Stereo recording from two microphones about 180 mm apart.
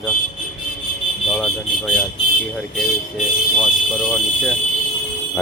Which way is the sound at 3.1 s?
Centre (ahead or behind).